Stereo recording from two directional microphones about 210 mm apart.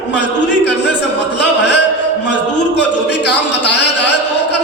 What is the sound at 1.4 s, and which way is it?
Music, 55° left (ahead or behind).